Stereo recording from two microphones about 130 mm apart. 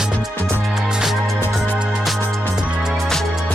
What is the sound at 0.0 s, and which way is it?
Music, 5° right (ahead or behind).